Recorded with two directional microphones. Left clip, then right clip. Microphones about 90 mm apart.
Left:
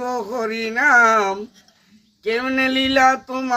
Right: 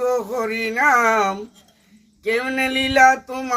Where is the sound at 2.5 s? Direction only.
25° right (ahead or behind).